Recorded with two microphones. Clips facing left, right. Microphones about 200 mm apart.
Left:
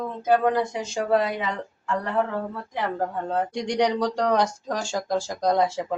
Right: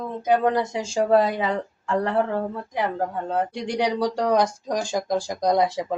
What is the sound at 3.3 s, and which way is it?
Speech, 5° right (ahead or behind).